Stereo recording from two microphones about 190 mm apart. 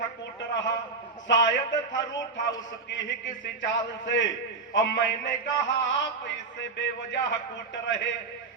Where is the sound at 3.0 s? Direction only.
70° left (ahead or behind).